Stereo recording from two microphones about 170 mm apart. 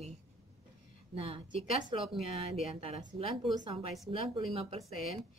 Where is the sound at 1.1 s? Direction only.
35° right (ahead or behind).